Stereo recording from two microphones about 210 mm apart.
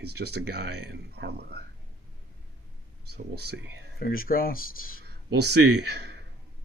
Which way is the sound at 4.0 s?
45° left (ahead or behind).